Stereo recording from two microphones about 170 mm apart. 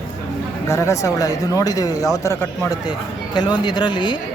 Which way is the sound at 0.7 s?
15° left (ahead or behind).